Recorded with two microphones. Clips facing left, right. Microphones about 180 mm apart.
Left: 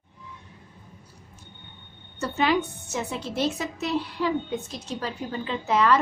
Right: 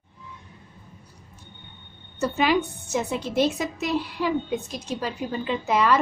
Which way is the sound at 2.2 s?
10° right (ahead or behind).